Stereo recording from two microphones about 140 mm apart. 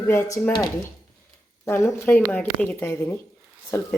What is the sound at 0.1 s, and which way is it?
Speech, 15° left (ahead or behind).